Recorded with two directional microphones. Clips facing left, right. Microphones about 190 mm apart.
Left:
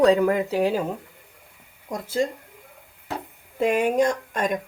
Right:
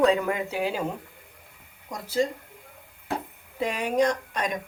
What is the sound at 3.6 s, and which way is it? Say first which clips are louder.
Speech: left 4 dB; 50° left (ahead or behind).